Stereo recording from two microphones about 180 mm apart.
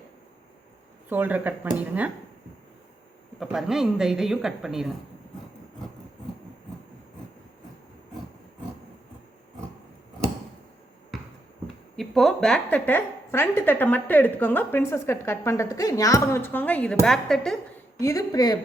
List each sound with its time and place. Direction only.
1.1 s speech: 10° right (ahead or behind)
3.4 s a woman's voice: centre (ahead or behind)
11.9 s a woman's voice: centre (ahead or behind)
18.0 s speech: 15° left (ahead or behind)